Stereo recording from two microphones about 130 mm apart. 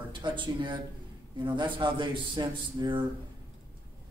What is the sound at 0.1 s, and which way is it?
A man's voice, 40° right (ahead or behind).